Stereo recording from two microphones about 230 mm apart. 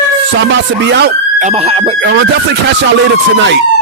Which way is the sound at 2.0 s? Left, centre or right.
Right.